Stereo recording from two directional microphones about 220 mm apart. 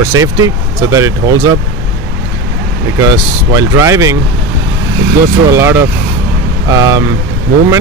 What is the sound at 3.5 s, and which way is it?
Speech, 15° right (ahead or behind).